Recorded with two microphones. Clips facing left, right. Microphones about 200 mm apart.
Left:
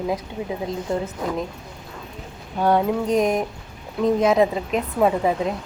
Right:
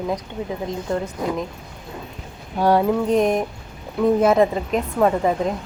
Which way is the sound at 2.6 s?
10° right (ahead or behind).